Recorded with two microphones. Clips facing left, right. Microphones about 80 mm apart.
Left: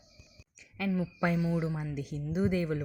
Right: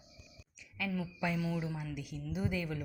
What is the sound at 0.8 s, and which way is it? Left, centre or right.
Speech, left.